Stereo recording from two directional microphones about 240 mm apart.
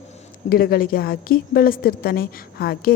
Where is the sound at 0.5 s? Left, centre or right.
Left.